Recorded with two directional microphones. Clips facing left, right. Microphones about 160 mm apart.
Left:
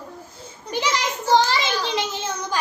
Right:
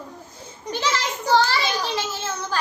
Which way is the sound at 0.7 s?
15° left (ahead or behind).